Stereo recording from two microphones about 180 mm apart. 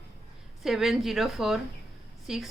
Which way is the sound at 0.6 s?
Centre (ahead or behind).